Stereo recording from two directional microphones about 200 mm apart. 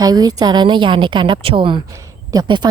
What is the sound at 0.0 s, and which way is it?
A woman's voice, 20° right (ahead or behind).